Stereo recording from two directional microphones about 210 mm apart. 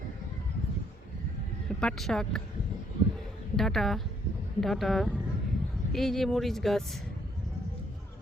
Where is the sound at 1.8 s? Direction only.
5° left (ahead or behind).